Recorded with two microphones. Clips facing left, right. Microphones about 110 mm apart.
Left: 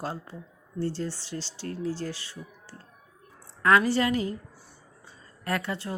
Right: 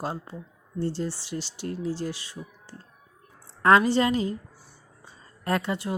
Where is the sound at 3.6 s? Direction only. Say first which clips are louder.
Right 3 dB; 25° right (ahead or behind).